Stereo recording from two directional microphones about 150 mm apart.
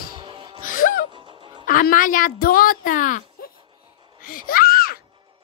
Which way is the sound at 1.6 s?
65° left (ahead or behind).